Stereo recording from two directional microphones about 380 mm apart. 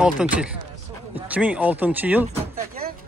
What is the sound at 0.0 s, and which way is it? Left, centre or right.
A man's voice, centre.